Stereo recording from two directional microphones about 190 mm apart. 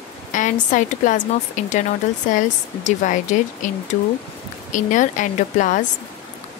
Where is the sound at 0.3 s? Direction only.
40° left (ahead or behind).